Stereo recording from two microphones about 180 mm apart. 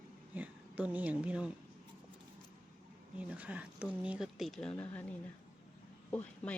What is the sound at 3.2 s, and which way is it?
Speech, 5° right (ahead or behind).